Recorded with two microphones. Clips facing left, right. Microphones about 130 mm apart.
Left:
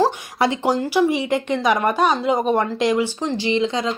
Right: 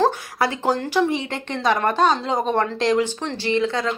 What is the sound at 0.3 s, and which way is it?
Speech, 20° left (ahead or behind).